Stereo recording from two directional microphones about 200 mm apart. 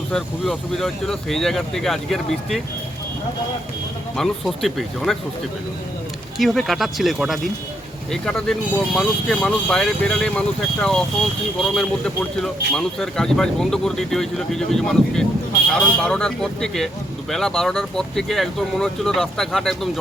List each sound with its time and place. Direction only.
0.1 s speech: centre (ahead or behind)
4.2 s speech: centre (ahead or behind)
6.4 s speech: centre (ahead or behind)